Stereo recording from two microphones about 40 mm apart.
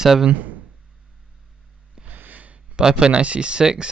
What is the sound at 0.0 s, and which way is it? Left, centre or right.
Speech, centre.